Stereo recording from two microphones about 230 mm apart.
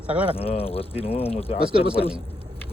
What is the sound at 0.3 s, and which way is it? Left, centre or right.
Speech, left.